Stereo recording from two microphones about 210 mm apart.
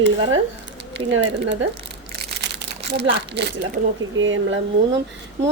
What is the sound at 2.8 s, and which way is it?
Speech, 55° right (ahead or behind).